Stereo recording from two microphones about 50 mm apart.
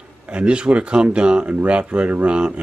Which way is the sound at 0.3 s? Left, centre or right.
Right.